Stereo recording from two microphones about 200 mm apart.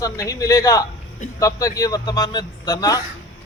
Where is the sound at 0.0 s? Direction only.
15° left (ahead or behind).